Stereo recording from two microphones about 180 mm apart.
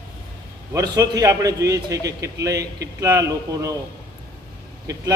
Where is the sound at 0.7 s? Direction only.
20° right (ahead or behind).